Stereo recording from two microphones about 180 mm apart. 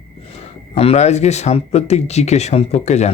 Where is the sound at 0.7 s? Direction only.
35° left (ahead or behind).